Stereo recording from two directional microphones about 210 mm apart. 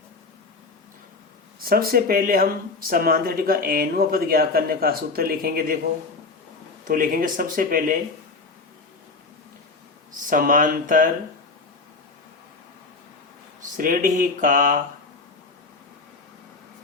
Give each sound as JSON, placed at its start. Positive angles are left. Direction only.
{"t": 1.6, "sound": "speech", "side_deg": -45}
{"t": 6.8, "sound": "speech", "side_deg": -40}
{"t": 10.2, "sound": "speech", "side_deg": -40}
{"t": 13.7, "sound": "speech", "side_deg": -40}